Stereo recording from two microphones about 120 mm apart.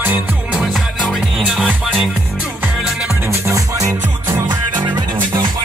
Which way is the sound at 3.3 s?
25° right (ahead or behind).